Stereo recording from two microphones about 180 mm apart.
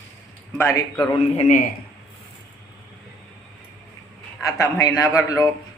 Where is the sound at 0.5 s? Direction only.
15° left (ahead or behind).